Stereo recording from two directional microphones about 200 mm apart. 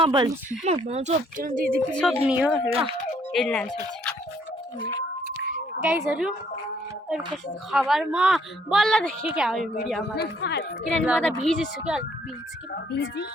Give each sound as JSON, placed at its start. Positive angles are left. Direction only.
{"t": 0.0, "sound": "speech", "side_deg": -25}
{"t": 1.9, "sound": "speech", "side_deg": 5}
{"t": 2.2, "sound": "a woman's voice", "side_deg": -10}
{"t": 2.6, "sound": "speech", "side_deg": -30}
{"t": 3.3, "sound": "speech", "side_deg": 5}
{"t": 6.1, "sound": "speech", "side_deg": -5}
{"t": 7.7, "sound": "speech", "side_deg": 0}
{"t": 10.2, "sound": "a woman's voice", "side_deg": 55}
{"t": 10.8, "sound": "speech", "side_deg": -5}
{"t": 12.7, "sound": "speech", "side_deg": 55}